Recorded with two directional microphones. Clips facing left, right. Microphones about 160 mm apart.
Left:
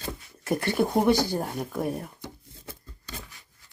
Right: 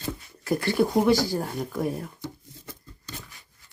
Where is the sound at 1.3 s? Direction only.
20° left (ahead or behind).